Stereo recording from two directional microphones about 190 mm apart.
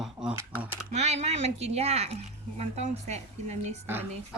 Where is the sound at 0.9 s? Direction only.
35° right (ahead or behind).